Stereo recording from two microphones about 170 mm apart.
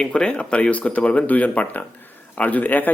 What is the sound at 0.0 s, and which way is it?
Speech, 5° left (ahead or behind).